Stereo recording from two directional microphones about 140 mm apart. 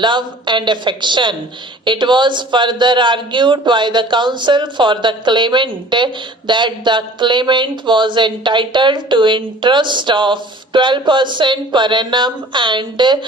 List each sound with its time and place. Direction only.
0.0 s speech: 35° right (ahead or behind)